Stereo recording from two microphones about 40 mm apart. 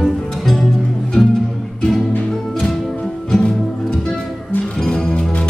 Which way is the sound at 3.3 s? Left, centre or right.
Left.